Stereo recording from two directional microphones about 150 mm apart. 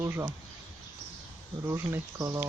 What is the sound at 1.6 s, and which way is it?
Speech, 15° right (ahead or behind).